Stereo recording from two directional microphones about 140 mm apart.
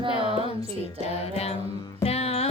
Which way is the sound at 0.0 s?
35° right (ahead or behind).